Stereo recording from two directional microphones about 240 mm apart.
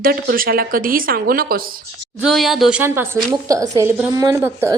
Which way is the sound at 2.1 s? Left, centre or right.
Centre.